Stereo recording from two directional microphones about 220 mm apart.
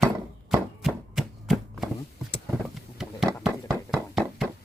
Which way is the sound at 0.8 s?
Centre (ahead or behind).